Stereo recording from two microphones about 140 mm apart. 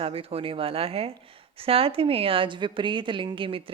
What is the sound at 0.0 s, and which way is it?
A woman's voice, 45° right (ahead or behind).